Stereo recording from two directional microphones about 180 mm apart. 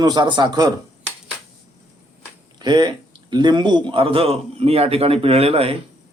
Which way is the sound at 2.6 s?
25° right (ahead or behind).